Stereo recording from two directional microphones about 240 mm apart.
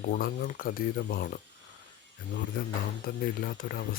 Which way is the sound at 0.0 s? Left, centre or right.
Left.